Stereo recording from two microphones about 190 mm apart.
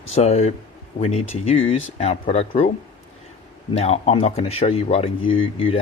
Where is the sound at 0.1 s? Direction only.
35° left (ahead or behind).